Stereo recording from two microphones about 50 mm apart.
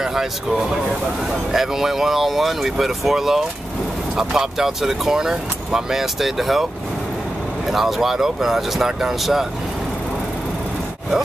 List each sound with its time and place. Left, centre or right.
0.0 s speech: centre
7.7 s speech: centre